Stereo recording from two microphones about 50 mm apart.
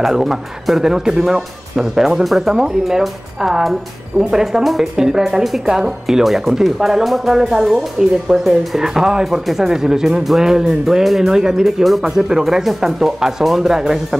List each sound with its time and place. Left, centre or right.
0.0 s speech: centre